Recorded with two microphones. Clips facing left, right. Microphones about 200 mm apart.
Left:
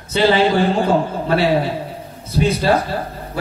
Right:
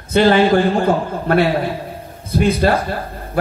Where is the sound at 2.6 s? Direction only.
55° right (ahead or behind).